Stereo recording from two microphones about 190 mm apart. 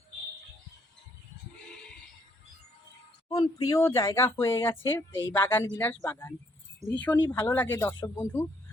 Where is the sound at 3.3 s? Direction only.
20° left (ahead or behind).